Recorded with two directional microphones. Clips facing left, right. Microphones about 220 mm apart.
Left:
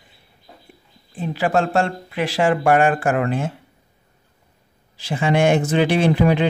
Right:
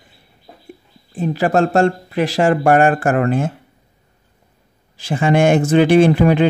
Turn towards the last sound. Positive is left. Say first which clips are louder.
# right 5 dB
turn(degrees=-50)  # may be behind; listen again after turning